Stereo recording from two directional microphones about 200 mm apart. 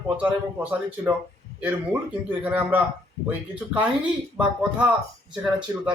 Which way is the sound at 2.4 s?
10° right (ahead or behind).